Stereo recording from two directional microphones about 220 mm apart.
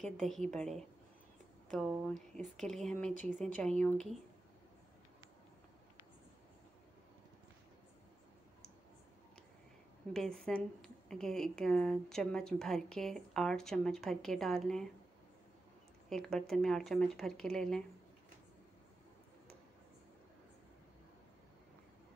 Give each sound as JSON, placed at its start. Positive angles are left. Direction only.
{"t": 0.0, "sound": "a woman's voice", "side_deg": 0}
{"t": 10.1, "sound": "a woman's voice", "side_deg": 5}
{"t": 16.1, "sound": "a woman's voice", "side_deg": 0}